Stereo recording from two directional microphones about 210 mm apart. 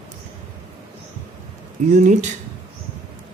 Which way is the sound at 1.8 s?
30° right (ahead or behind).